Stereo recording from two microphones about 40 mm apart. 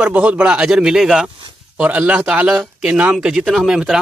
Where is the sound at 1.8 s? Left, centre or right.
Right.